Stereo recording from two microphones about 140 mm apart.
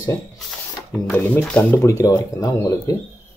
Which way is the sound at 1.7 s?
20° left (ahead or behind).